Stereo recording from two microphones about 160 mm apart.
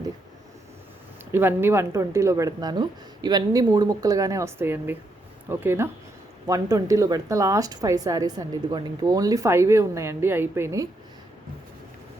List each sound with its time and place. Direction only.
1.3 s speech: 15° right (ahead or behind)